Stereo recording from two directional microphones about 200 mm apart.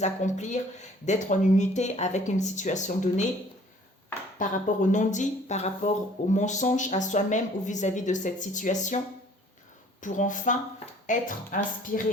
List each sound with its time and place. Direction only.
0.0 s speech: 35° left (ahead or behind)
4.4 s speech: 40° left (ahead or behind)
10.0 s speech: 40° left (ahead or behind)